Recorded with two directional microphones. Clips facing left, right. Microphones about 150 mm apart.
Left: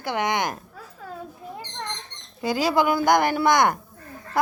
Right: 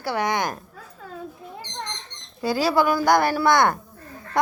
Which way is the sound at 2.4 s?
20° left (ahead or behind).